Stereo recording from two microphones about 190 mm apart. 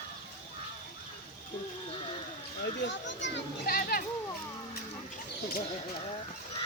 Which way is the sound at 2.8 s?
70° left (ahead or behind).